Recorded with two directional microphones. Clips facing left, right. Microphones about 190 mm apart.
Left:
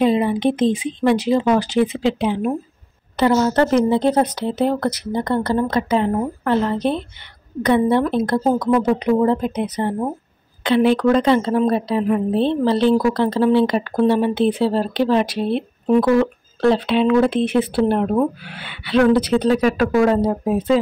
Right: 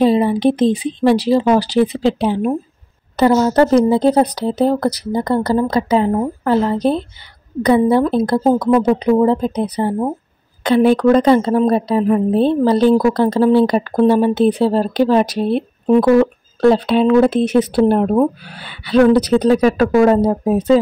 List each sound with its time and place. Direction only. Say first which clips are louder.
0.0 s a woman's voice: right 4 dB; 35° right (ahead or behind)
10.6 s a woman's voice: right 3 dB; 45° right (ahead or behind)